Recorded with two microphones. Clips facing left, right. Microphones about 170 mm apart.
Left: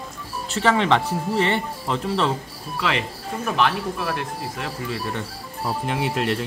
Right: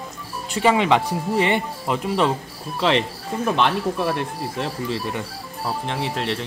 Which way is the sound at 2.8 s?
30° right (ahead or behind).